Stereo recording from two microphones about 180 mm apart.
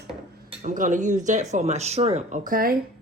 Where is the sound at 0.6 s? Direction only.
45° right (ahead or behind).